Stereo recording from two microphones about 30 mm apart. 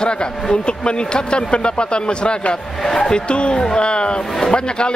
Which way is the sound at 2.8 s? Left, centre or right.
Centre.